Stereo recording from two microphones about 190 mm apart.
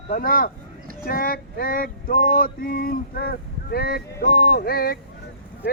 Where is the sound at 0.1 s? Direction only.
50° left (ahead or behind).